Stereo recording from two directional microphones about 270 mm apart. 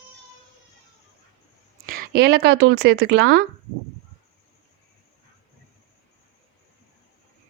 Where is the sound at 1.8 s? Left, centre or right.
Right.